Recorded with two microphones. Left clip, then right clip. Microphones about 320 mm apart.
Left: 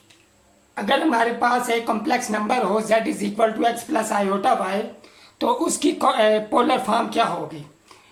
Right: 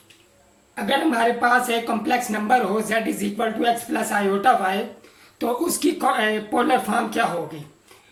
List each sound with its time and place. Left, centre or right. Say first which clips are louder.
0.9 s speech: left 1 dB; centre